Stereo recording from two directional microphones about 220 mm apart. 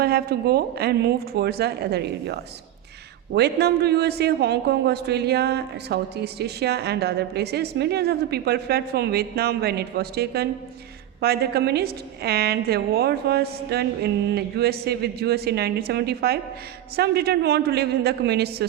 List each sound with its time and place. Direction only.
0.0 s a man's voice: 45° right (ahead or behind)